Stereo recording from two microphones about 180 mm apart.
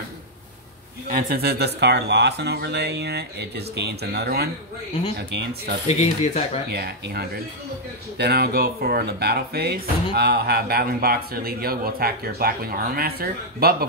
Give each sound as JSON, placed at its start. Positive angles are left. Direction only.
{"t": 1.0, "sound": "speech", "side_deg": -55}
{"t": 5.9, "sound": "speech", "side_deg": 40}
{"t": 6.7, "sound": "speech", "side_deg": -60}